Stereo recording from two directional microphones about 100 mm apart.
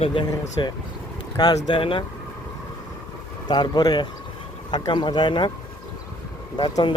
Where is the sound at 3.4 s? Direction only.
45° left (ahead or behind).